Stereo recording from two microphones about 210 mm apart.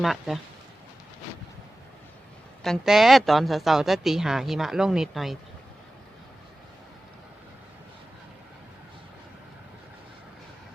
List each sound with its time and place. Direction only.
0.0 s speech: centre (ahead or behind)
2.6 s speech: centre (ahead or behind)